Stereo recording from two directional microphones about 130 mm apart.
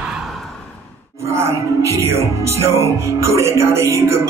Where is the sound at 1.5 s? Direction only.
20° right (ahead or behind).